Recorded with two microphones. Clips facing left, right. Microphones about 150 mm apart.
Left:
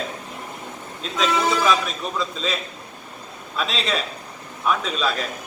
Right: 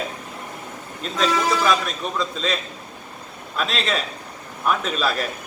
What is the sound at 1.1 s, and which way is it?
A man's voice, centre (ahead or behind).